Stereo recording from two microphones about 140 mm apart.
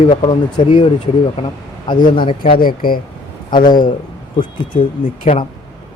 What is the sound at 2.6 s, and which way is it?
Speech, 90° left.